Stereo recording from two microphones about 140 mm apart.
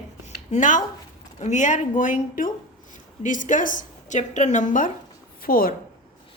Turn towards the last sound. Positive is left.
turn(degrees=90)